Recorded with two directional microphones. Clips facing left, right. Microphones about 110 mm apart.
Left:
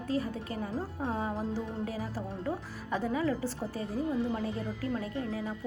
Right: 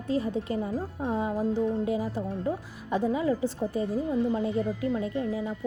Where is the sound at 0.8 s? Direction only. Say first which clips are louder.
Right 4 dB; 15° right (ahead or behind).